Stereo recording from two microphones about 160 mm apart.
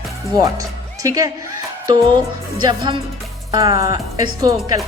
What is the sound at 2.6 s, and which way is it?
Speech, 30° right (ahead or behind).